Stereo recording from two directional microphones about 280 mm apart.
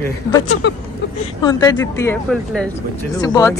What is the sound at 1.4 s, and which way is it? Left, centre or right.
A woman's voice, centre.